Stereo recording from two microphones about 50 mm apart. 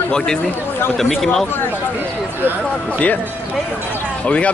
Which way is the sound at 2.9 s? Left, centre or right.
Left.